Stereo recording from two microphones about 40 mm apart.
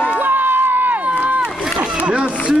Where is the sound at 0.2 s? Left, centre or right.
Right.